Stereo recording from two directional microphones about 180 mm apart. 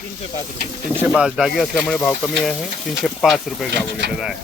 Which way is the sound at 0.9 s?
10° right (ahead or behind).